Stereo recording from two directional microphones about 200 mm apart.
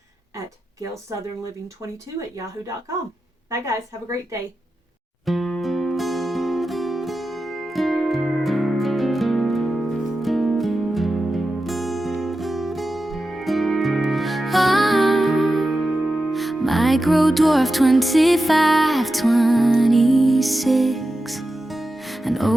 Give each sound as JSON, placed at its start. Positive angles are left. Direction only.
{"t": 3.5, "sound": "a woman's voice", "side_deg": -15}
{"t": 5.2, "sound": "music", "side_deg": 0}